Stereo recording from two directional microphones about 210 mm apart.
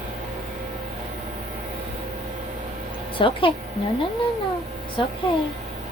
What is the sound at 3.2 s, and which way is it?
Speech, 25° left (ahead or behind).